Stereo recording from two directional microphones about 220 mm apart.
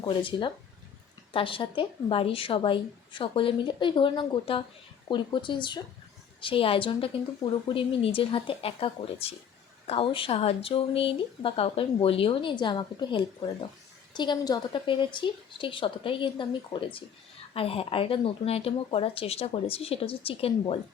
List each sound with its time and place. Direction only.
0.0 s speech: 25° left (ahead or behind)